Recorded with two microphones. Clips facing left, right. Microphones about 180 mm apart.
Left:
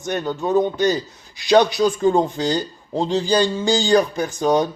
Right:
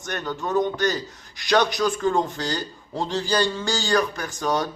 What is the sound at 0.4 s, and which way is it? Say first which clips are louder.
Speech: left 4 dB; 15° left (ahead or behind).